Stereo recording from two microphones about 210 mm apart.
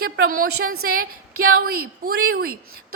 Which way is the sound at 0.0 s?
45° right (ahead or behind).